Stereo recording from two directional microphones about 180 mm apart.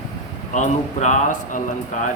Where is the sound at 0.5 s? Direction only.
40° left (ahead or behind).